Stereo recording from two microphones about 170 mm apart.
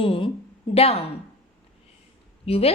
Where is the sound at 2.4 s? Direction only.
35° left (ahead or behind).